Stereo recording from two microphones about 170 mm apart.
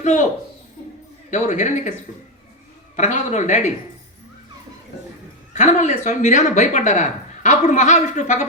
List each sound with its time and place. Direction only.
0.0 s a woman's voice: 45° left (ahead or behind)
1.3 s speech: 45° left (ahead or behind)
2.9 s speech: 45° left (ahead or behind)
5.5 s speech: 45° left (ahead or behind)